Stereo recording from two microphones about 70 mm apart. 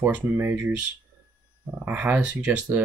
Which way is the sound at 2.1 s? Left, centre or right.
Centre.